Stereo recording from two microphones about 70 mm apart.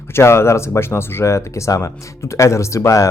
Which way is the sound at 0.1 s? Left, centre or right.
Left.